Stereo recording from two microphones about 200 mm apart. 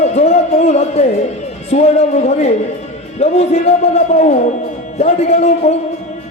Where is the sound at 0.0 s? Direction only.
35° left (ahead or behind).